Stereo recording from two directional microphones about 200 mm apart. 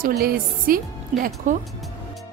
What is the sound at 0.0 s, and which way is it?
A woman's voice, 50° right (ahead or behind).